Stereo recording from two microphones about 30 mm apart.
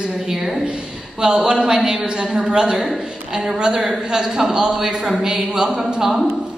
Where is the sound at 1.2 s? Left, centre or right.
Right.